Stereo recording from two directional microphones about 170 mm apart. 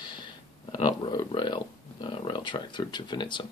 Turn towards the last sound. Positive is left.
turn(degrees=25)  # may be behind; listen again after turning